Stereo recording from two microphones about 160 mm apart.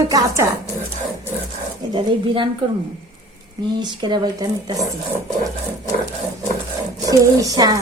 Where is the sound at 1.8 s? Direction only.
25° right (ahead or behind).